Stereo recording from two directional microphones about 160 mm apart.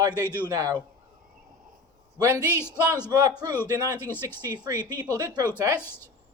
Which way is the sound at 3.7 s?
25° right (ahead or behind).